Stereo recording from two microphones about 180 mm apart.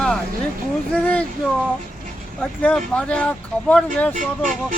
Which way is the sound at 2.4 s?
5° left (ahead or behind).